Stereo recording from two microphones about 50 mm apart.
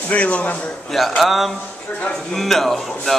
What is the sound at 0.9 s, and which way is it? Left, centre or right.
A man's voice, centre.